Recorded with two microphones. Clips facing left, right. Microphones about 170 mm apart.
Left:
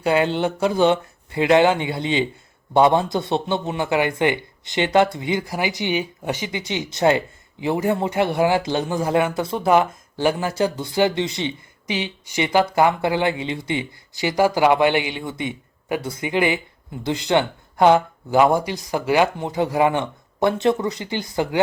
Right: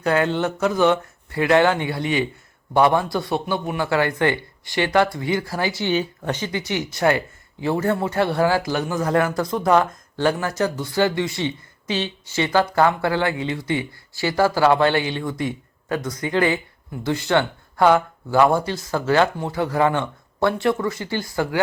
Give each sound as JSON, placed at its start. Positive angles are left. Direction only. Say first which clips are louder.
{"t": 0.0, "sound": "speech", "louder": "left 1 dB", "side_deg": 20}
{"t": 9.6, "sound": "speech", "louder": "left 1 dB", "side_deg": 10}